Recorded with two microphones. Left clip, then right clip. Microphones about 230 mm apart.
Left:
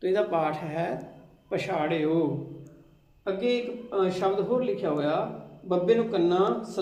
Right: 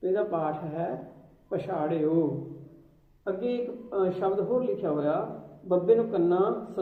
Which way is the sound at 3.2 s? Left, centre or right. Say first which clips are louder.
Left 3 dB; left.